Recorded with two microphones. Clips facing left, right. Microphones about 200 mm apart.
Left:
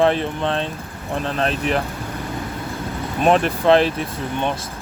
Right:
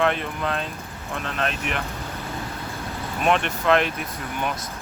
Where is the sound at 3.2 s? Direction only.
35° left (ahead or behind).